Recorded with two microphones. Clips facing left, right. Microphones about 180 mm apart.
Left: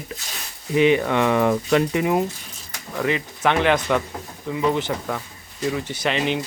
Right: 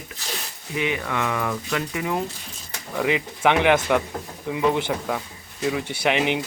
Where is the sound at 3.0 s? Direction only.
15° right (ahead or behind).